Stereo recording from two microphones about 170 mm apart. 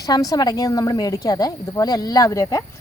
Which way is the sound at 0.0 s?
20° left (ahead or behind).